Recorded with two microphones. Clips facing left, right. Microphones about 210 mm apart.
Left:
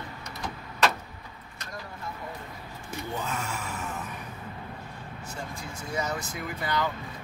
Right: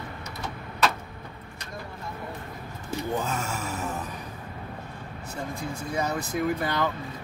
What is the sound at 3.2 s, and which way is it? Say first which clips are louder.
Gasp: right 3 dB; 45° right (ahead or behind).